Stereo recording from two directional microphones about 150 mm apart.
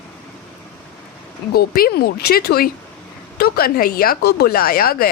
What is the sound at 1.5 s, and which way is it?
Speech, 85° left.